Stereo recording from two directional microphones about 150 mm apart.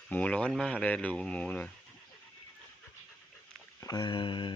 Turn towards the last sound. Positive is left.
turn(degrees=35)  # may be behind; listen again after turning